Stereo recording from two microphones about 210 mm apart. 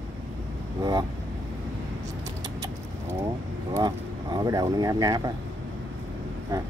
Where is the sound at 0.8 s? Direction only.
20° right (ahead or behind).